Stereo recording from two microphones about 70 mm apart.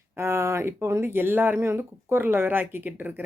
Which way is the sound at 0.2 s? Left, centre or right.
Right.